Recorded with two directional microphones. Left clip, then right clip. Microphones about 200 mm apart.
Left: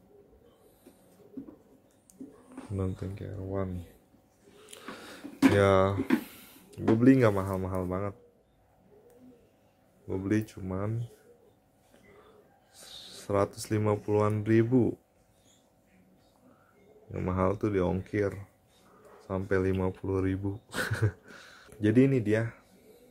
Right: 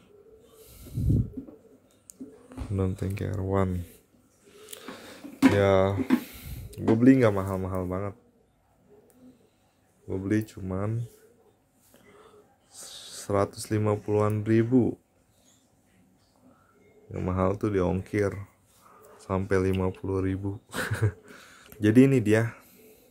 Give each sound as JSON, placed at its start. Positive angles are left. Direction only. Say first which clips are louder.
{"t": 2.1, "sound": "a sound", "louder": "right 3 dB", "side_deg": -15}
{"t": 2.7, "sound": "speech", "louder": "right 5 dB", "side_deg": -15}
{"t": 3.2, "sound": "speech", "louder": "right 8 dB", "side_deg": -35}
{"t": 4.6, "sound": "a sound", "louder": "right 1 dB", "side_deg": -5}
{"t": 6.7, "sound": "speech", "louder": "right 2 dB", "side_deg": -5}
{"t": 10.0, "sound": "speech", "louder": "right 2 dB", "side_deg": 0}
{"t": 12.7, "sound": "speech", "louder": "right 4 dB", "side_deg": -10}
{"t": 17.1, "sound": "speech", "louder": "right 2 dB", "side_deg": -5}